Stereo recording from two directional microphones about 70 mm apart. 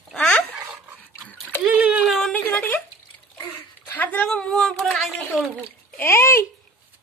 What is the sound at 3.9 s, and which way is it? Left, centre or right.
Speech, left.